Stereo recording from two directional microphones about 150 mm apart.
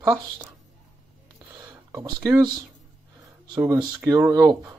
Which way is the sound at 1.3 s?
25° right (ahead or behind).